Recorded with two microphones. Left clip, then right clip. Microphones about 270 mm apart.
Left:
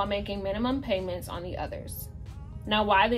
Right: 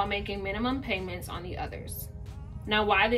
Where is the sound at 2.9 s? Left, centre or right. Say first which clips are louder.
Left 2 dB; centre.